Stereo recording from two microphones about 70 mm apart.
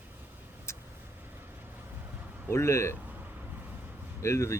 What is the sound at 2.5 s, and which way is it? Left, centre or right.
Speech, left.